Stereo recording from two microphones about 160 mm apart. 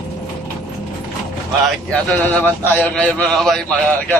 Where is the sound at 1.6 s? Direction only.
10° left (ahead or behind).